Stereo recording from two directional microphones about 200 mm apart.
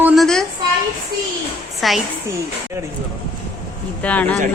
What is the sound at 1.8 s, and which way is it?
Speech, centre (ahead or behind).